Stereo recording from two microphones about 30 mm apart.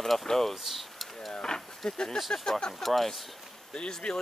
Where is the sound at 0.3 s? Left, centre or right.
Centre.